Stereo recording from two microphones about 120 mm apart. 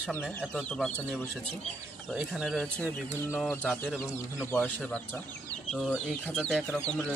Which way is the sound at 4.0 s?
20° left (ahead or behind).